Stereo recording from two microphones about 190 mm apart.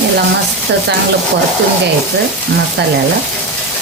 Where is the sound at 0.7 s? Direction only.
65° right (ahead or behind).